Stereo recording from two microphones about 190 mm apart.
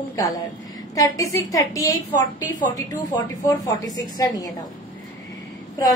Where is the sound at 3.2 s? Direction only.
15° left (ahead or behind).